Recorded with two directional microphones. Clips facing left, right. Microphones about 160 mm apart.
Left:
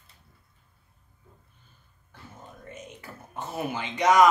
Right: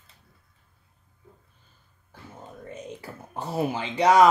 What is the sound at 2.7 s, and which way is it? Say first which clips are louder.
Speech: right 5 dB; 30° right (ahead or behind).